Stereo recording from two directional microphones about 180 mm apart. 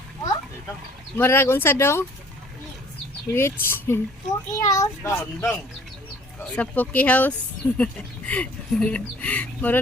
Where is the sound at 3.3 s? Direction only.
15° left (ahead or behind).